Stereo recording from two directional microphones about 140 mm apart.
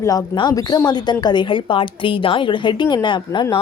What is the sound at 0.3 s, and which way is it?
A woman's voice, 30° left (ahead or behind).